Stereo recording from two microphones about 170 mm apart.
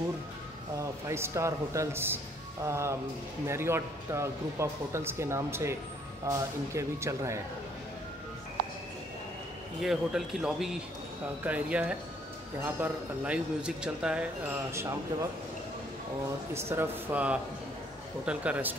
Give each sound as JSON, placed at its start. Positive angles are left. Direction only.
{"t": 0.7, "sound": "speech", "side_deg": -15}
{"t": 9.8, "sound": "a man's voice", "side_deg": 0}
{"t": 14.7, "sound": "speech", "side_deg": -15}
{"t": 16.5, "sound": "speech", "side_deg": -15}